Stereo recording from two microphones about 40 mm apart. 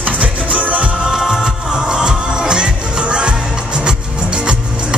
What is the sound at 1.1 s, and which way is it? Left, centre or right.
Music, centre.